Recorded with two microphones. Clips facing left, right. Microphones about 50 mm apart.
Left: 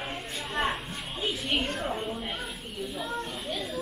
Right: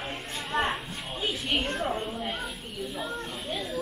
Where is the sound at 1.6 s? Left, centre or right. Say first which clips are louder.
Right 1 dB; centre.